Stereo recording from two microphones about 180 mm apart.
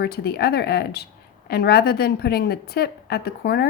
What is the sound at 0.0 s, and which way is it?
A woman's voice, 65° left (ahead or behind).